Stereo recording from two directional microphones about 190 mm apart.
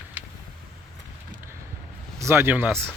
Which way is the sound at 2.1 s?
15° right (ahead or behind).